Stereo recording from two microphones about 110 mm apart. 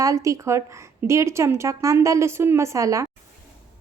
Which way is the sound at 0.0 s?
30° right (ahead or behind).